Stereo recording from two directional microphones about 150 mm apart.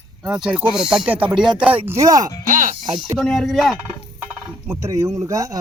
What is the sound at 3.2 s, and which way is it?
Speech, 5° left (ahead or behind).